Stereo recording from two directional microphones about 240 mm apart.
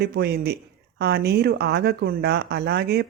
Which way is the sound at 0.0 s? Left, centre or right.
Right.